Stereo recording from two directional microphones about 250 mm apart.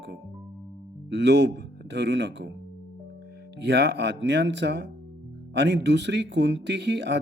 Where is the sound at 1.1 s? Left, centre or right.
Right.